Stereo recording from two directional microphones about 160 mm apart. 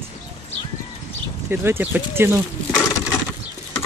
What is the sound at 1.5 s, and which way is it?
Speech, 15° right (ahead or behind).